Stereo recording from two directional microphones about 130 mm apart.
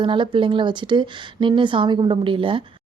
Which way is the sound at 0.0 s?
40° right (ahead or behind).